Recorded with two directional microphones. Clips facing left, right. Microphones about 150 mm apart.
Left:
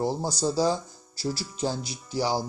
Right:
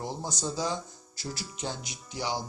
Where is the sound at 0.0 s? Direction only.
35° left (ahead or behind).